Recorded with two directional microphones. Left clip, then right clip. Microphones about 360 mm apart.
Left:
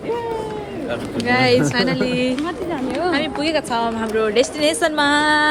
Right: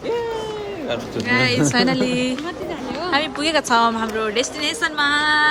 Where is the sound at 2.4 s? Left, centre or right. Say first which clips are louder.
Left 4 dB; centre.